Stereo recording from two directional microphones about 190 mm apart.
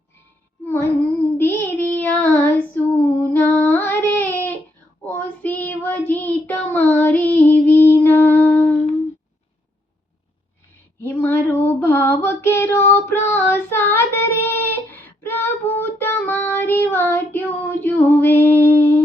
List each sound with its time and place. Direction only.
1.4 s female singing: 10° left (ahead or behind)
5.0 s child singing: 10° left (ahead or behind)
11.0 s female singing: 10° left (ahead or behind)